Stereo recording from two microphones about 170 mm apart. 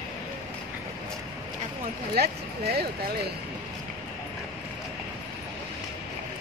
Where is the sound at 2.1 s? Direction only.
70° right (ahead or behind).